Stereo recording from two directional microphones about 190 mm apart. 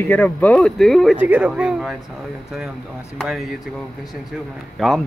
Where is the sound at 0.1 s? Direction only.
10° left (ahead or behind).